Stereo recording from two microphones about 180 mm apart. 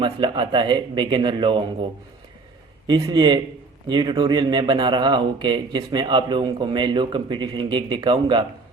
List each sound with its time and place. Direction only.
0.0 s speech: 25° right (ahead or behind)
2.9 s speech: 20° right (ahead or behind)